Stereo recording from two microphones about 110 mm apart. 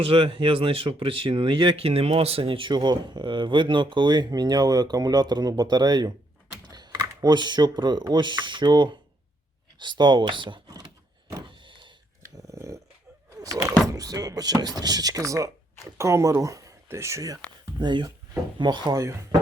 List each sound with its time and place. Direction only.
0.0 s speech: 60° right (ahead or behind)
11.4 s power windows: 50° right (ahead or behind)
12.4 s dog: 30° right (ahead or behind)
13.4 s door: 30° right (ahead or behind)
13.9 s speech: 35° right (ahead or behind)
17.7 s speech: 45° right (ahead or behind)
19.0 s speech: 30° right (ahead or behind)